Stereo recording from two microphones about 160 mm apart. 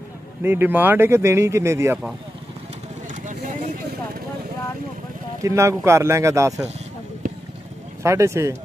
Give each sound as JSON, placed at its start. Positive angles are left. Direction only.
{"t": 0.4, "sound": "speech", "side_deg": -10}
{"t": 3.3, "sound": "vehicle", "side_deg": -50}
{"t": 5.4, "sound": "speech", "side_deg": -20}
{"t": 7.2, "sound": "a sound", "side_deg": -55}
{"t": 8.0, "sound": "speech", "side_deg": -20}